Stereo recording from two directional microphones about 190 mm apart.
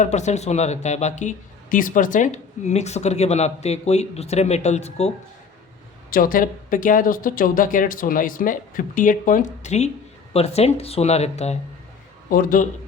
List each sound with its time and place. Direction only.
0.0 s speech: 35° left (ahead or behind)
6.1 s speech: 50° left (ahead or behind)
12.3 s speech: 45° left (ahead or behind)